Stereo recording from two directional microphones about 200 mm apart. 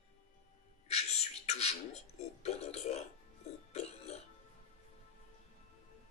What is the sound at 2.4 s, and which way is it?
Music, 30° left (ahead or behind).